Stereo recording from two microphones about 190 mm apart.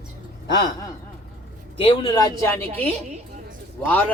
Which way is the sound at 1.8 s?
30° left (ahead or behind).